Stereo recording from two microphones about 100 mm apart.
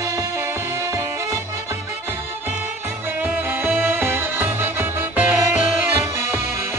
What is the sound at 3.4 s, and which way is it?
Music, 20° right (ahead or behind).